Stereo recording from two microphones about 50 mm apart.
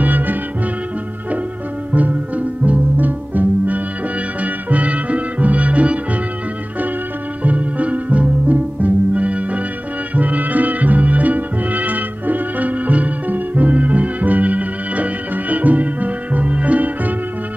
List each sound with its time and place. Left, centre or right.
0.0 s music: right
1.9 s music: right
7.4 s music: right